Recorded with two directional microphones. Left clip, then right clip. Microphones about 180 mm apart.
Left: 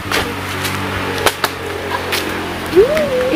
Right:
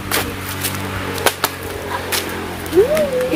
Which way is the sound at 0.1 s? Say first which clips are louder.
Left 3 dB; 40° right (ahead or behind).